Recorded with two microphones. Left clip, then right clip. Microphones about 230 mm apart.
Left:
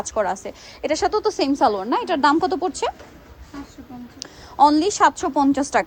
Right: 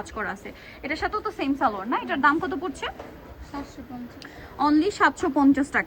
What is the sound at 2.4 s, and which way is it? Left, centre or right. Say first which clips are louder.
Speech: left 8 dB; left.